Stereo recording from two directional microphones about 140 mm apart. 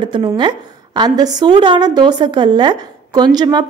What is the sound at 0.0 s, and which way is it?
A woman's voice, 35° right (ahead or behind).